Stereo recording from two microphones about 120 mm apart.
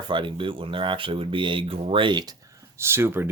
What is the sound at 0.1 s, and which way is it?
Speech, 40° right (ahead or behind).